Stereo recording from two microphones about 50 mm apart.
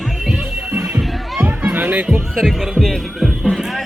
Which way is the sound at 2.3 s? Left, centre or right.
Centre.